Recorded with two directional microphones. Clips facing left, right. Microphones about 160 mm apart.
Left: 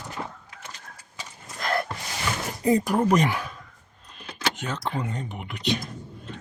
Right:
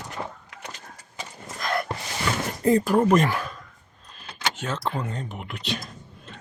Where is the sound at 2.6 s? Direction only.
15° left (ahead or behind).